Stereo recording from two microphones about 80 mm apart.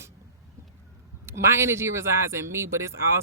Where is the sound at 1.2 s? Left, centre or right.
Right.